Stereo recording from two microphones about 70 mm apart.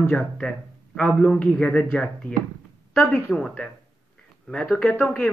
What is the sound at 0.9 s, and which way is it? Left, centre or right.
Speech, centre.